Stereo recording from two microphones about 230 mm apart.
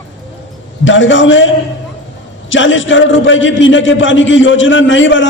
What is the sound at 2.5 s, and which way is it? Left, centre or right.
A man's voice, left.